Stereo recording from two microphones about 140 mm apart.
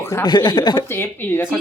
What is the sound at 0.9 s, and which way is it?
Speech, 15° left (ahead or behind).